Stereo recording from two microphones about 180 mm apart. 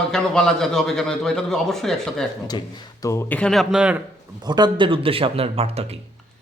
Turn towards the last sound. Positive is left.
turn(degrees=-35)  # may be behind; listen again after turning